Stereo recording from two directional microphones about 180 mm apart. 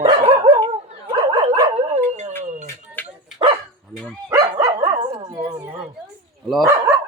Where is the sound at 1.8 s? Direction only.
40° right (ahead or behind).